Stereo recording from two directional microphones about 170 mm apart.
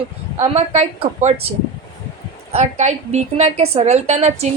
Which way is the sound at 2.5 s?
40° right (ahead or behind).